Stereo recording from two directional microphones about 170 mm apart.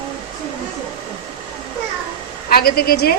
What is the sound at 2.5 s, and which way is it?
Speech, 65° left (ahead or behind).